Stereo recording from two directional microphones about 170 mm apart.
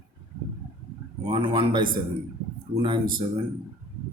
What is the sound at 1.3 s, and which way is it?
Speech, 25° right (ahead or behind).